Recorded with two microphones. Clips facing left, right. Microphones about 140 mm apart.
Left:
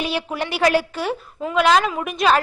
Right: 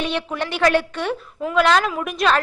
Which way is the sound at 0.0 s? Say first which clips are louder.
Even; 10° left (ahead or behind).